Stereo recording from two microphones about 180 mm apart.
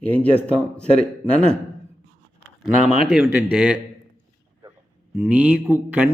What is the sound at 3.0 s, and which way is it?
Speech, centre (ahead or behind).